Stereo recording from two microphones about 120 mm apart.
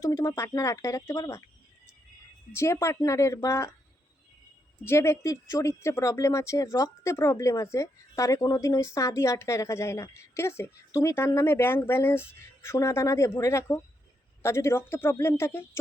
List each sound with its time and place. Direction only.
0.0 s speech: 25° left (ahead or behind)
2.6 s speech: 25° left (ahead or behind)
4.9 s speech: 25° left (ahead or behind)